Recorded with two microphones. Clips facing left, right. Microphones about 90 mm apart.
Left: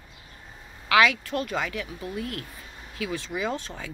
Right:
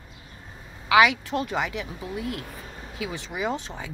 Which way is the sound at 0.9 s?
15° right (ahead or behind).